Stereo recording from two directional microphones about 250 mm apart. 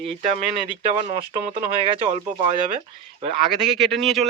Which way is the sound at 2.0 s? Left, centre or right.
Right.